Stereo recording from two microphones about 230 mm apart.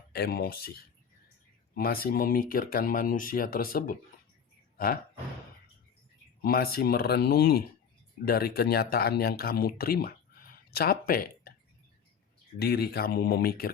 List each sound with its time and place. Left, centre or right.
0.1 s speech: left
1.7 s speech: left
6.4 s speech: left
12.5 s speech: left